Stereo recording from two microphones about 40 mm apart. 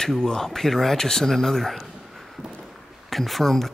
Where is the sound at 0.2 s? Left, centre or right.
Centre.